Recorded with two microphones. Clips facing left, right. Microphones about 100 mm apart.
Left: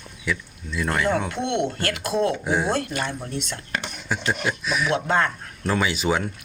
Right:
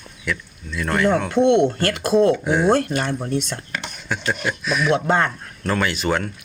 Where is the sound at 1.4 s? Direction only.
40° right (ahead or behind).